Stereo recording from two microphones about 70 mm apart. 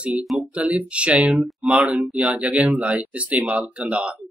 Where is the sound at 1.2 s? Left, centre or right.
Centre.